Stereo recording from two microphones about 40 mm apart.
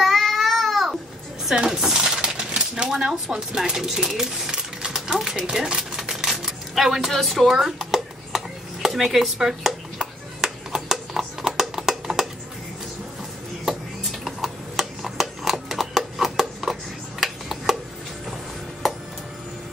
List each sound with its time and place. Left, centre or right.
0.0 s babbling: centre
1.5 s speech: centre
2.2 s typewriter: centre
2.9 s speech: centre
5.7 s typewriter: centre
7.1 s a woman's voice: centre
8.8 s a sound: centre
11.6 s music: centre
14.2 s a sound: centre